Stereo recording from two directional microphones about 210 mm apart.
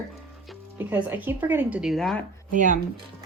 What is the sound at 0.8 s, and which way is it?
Speech, 10° right (ahead or behind).